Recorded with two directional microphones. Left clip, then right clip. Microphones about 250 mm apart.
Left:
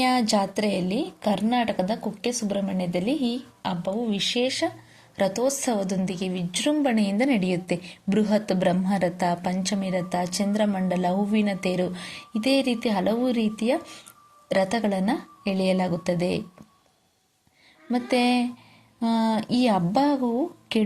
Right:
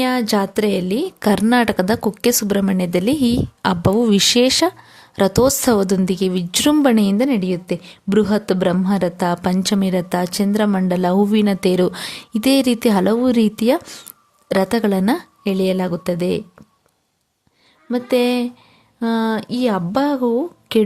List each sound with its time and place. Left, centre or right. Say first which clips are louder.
0.0 s a woman's voice: right 4 dB; right
17.9 s a woman's voice: right 6 dB; right